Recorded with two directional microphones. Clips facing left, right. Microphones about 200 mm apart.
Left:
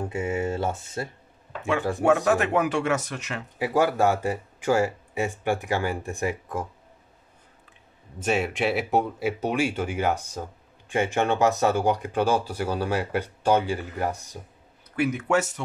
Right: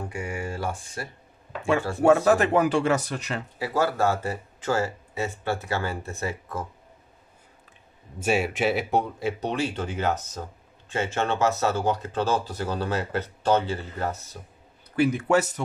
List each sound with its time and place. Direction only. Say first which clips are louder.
0.1 s speech: left 5 dB; 25° left (ahead or behind)
2.2 s speech: right 2 dB; 35° right (ahead or behind)
3.5 s speech: left 3 dB; 15° left (ahead or behind)
8.2 s speech: right 1 dB; 5° right (ahead or behind); by 14.4 s 15° left (ahead or behind)
15.0 s speech: right 2 dB; 30° right (ahead or behind)